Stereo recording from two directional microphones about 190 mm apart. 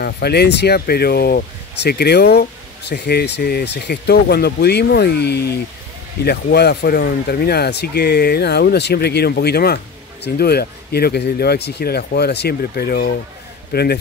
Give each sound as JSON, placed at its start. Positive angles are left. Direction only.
{"t": 0.0, "sound": "speech", "side_deg": 55}